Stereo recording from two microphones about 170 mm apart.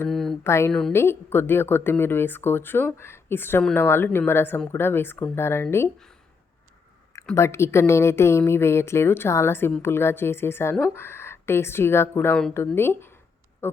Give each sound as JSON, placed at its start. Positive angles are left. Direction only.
{"t": 0.1, "sound": "a sound", "side_deg": 0}
{"t": 0.4, "sound": "speech", "side_deg": 15}
{"t": 0.7, "sound": "a woman's voice", "side_deg": 5}
{"t": 7.3, "sound": "speech", "side_deg": 15}